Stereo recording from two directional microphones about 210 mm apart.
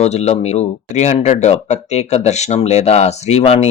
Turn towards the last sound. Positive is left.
turn(degrees=30)  # may be behind; listen again after turning